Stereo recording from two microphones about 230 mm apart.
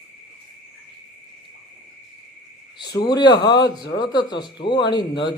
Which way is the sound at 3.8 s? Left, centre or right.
Left.